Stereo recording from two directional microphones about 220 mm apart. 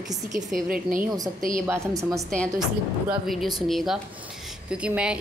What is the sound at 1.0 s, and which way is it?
Speech, 15° right (ahead or behind).